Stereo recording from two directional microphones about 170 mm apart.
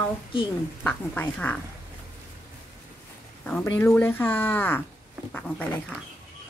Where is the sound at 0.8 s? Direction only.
10° left (ahead or behind).